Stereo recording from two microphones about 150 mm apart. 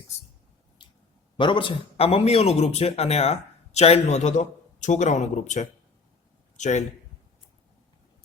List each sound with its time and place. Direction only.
1.4 s speech: 35° left (ahead or behind); by 6.8 s 50° left (ahead or behind)